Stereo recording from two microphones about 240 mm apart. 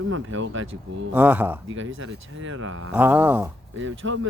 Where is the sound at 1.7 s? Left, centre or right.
Right.